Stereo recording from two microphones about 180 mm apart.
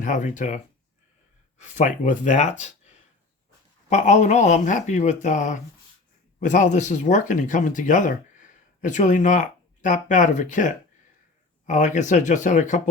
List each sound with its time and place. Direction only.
0.0 s speech: 45° left (ahead or behind)
1.6 s speech: 45° left (ahead or behind)
3.8 s speech: 40° left (ahead or behind)